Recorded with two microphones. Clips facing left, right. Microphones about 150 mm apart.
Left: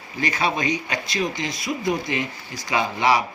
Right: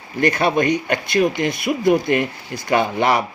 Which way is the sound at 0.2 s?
55° right (ahead or behind).